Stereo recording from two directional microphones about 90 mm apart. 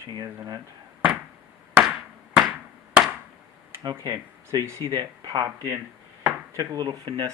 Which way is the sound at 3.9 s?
35° right (ahead or behind).